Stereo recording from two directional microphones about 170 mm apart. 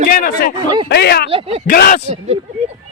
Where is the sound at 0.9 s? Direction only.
70° left (ahead or behind).